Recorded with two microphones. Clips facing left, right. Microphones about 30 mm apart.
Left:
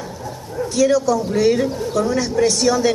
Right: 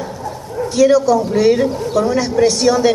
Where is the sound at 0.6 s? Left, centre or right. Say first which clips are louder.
Right 4 dB; centre.